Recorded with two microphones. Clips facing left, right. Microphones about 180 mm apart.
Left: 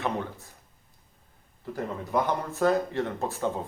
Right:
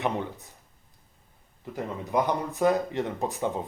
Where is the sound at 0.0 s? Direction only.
20° right (ahead or behind).